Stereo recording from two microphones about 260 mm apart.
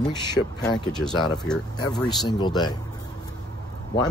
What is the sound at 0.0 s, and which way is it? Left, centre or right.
Speech, centre.